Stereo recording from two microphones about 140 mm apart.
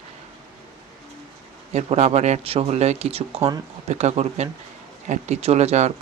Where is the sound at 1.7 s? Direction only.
50° right (ahead or behind).